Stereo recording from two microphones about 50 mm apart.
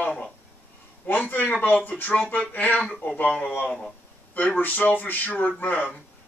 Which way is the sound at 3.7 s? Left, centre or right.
Centre.